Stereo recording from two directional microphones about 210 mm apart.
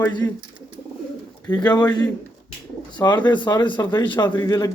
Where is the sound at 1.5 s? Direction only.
20° left (ahead or behind).